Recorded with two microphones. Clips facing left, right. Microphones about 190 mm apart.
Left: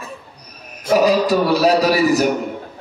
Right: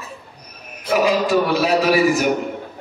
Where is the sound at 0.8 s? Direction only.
40° left (ahead or behind).